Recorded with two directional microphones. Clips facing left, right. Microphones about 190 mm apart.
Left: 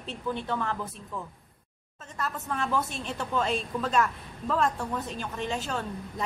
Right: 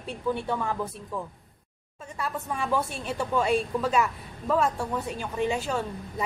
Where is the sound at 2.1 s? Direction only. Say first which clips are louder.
Right 1 dB; 10° right (ahead or behind).